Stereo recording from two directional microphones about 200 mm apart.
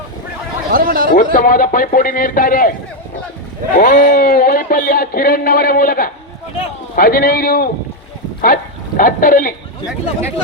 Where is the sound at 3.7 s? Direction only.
40° left (ahead or behind).